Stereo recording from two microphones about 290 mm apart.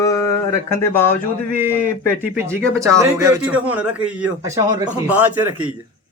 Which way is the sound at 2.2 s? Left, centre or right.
Centre.